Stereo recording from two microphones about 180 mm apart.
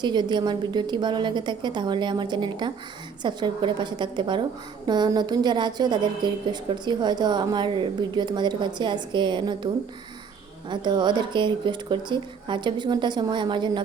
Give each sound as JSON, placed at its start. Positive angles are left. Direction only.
{"t": 0.0, "sound": "a woman's voice", "side_deg": -25}